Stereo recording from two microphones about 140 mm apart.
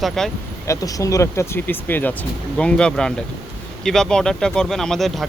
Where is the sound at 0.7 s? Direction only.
25° left (ahead or behind).